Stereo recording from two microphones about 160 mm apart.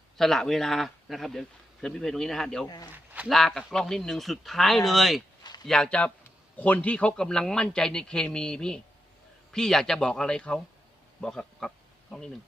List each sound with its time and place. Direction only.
0.2 s a man's voice: 5° left (ahead or behind)
2.6 s a man's voice: 25° left (ahead or behind)
2.9 s a man's voice: 5° right (ahead or behind)